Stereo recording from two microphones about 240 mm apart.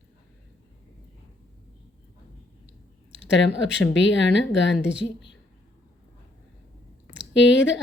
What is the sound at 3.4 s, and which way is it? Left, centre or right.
Speech, left.